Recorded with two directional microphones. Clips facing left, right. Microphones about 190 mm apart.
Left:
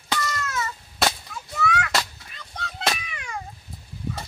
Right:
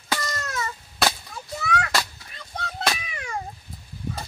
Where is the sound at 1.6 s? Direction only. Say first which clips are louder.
Left 2 dB; 35° right (ahead or behind).